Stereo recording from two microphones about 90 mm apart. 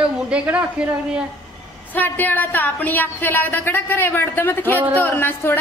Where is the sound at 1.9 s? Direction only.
20° left (ahead or behind).